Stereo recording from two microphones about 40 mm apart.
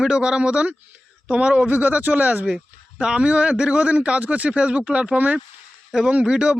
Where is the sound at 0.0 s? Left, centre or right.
Right.